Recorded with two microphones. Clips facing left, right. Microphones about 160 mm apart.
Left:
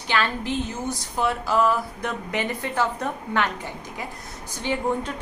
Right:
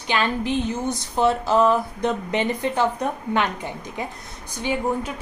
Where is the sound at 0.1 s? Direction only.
20° right (ahead or behind).